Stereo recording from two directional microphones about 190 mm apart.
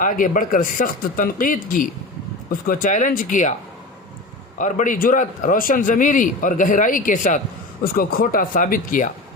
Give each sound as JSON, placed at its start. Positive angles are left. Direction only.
{"t": 0.0, "sound": "a man's voice", "side_deg": 45}
{"t": 4.5, "sound": "a man's voice", "side_deg": 40}